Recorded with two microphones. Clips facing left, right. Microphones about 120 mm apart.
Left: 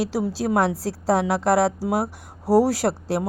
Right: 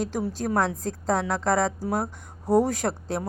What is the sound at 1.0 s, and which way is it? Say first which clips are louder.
Speech: left 5 dB; 10° left (ahead or behind).